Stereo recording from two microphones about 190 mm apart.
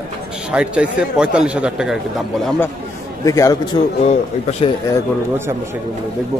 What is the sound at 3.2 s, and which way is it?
Speech, 15° left (ahead or behind).